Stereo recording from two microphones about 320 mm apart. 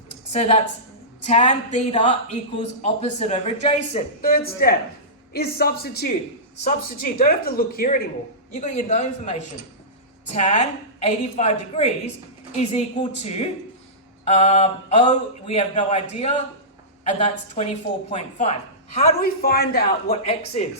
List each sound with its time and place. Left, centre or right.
0.3 s a man's voice: centre
10.3 s a man's voice: left